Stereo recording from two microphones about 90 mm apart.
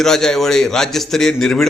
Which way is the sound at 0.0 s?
5° left (ahead or behind).